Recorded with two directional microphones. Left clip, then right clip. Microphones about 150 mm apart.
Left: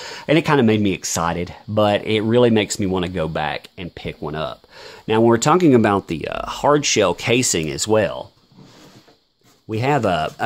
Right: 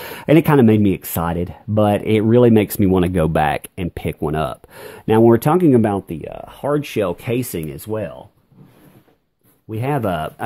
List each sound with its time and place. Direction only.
0.0 s speech: 40° right (ahead or behind)
5.2 s speech: 15° right (ahead or behind)
5.9 s speech: 15° left (ahead or behind)
6.8 s speech: 5° left (ahead or behind)
7.6 s speech: 25° left (ahead or behind)
7.9 s speech: 50° left (ahead or behind)
9.7 s speech: 10° left (ahead or behind)
9.9 s speech: centre (ahead or behind)